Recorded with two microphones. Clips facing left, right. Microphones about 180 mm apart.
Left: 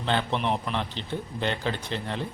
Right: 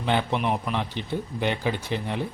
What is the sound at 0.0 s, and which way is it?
A man's voice, 15° right (ahead or behind).